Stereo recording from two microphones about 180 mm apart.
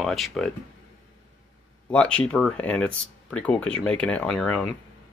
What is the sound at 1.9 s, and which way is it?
Speech, 5° left (ahead or behind).